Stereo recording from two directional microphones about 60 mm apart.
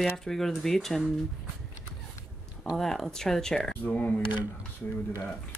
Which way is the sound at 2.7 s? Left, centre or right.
Centre.